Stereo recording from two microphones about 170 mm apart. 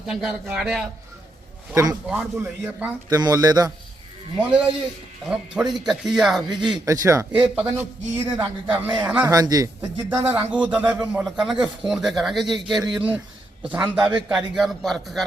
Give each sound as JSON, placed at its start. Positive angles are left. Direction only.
{"t": 0.1, "sound": "speech", "side_deg": -5}
{"t": 1.7, "sound": "speech", "side_deg": -20}
{"t": 2.0, "sound": "speech", "side_deg": 0}
{"t": 3.1, "sound": "speech", "side_deg": -20}
{"t": 4.4, "sound": "speech", "side_deg": -5}
{"t": 6.5, "sound": "speech", "side_deg": -25}
{"t": 7.3, "sound": "speech", "side_deg": -5}
{"t": 9.2, "sound": "speech", "side_deg": -20}
{"t": 10.1, "sound": "speech", "side_deg": -10}
{"t": 12.5, "sound": "speech", "side_deg": -25}
{"t": 12.9, "sound": "speech", "side_deg": -5}